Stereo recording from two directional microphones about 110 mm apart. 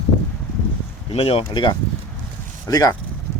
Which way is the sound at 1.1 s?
60° left (ahead or behind).